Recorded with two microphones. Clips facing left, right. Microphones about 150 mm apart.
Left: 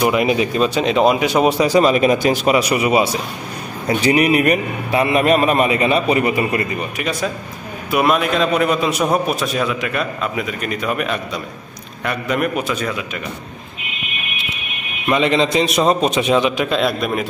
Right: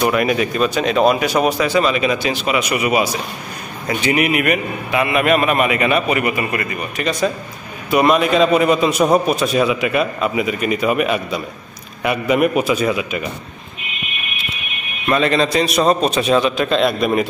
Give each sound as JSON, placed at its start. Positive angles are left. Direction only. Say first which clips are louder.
{"t": 0.0, "sound": "speech", "louder": "left 1 dB", "side_deg": 20}
{"t": 1.7, "sound": "a man's voice", "louder": "left 3 dB", "side_deg": 40}
{"t": 7.0, "sound": "a man's voice", "louder": "right 6 dB", "side_deg": 5}
{"t": 15.0, "sound": "a man's voice", "louder": "even", "side_deg": 20}